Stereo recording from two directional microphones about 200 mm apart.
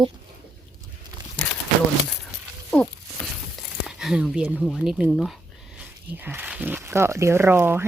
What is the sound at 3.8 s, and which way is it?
Speech, centre (ahead or behind).